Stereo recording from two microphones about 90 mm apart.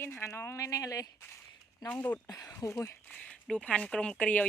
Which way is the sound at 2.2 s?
40° left (ahead or behind).